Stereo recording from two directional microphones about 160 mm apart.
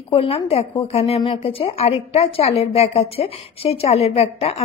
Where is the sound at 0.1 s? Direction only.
35° left (ahead or behind).